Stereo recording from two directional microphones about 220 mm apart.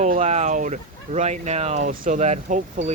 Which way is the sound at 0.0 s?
30° right (ahead or behind).